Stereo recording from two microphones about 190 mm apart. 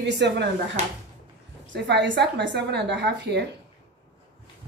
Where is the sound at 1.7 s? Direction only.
65° right (ahead or behind).